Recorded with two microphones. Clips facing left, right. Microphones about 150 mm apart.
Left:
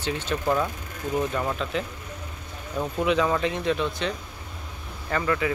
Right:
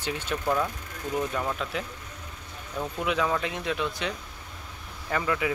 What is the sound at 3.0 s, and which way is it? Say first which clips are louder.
Speech: left 4 dB; centre (ahead or behind).